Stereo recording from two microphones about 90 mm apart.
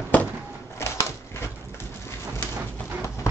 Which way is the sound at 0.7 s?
30° left (ahead or behind).